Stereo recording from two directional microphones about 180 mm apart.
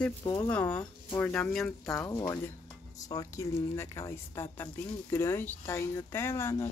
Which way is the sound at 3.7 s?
15° left (ahead or behind).